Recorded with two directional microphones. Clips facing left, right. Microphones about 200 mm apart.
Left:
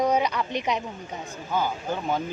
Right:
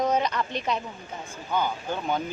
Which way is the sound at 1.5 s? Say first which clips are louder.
Left 1 dB; 5° left (ahead or behind).